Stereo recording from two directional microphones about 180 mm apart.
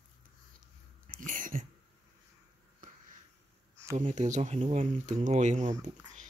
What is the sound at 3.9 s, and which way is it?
Speech, 40° right (ahead or behind).